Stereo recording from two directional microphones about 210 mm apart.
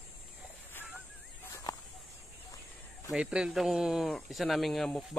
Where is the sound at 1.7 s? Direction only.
20° left (ahead or behind).